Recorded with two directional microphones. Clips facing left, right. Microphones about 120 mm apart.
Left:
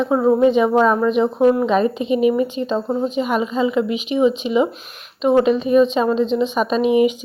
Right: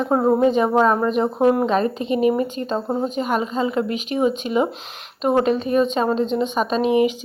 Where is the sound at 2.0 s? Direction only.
35° right (ahead or behind).